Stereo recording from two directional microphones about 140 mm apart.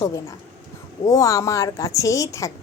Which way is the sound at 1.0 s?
25° left (ahead or behind).